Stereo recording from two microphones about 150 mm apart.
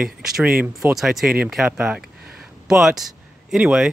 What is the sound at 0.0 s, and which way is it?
Speech, 5° right (ahead or behind).